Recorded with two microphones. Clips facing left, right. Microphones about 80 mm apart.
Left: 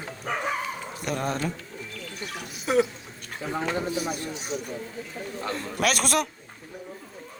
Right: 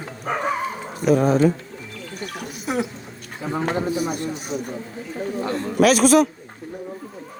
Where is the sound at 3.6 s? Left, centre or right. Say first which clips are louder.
Right 6 dB; right.